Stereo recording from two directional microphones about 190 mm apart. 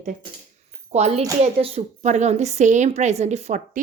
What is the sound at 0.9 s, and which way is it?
A woman's voice, 35° right (ahead or behind).